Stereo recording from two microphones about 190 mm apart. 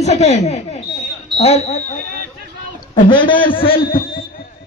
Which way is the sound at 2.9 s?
25° left (ahead or behind).